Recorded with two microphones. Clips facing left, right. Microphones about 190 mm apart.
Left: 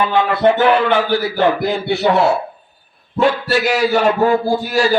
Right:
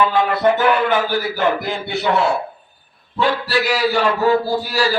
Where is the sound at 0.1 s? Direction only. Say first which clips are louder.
Left 2 dB; 30° left (ahead or behind).